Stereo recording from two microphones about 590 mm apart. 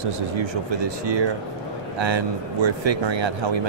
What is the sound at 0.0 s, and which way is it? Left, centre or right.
Speech, right.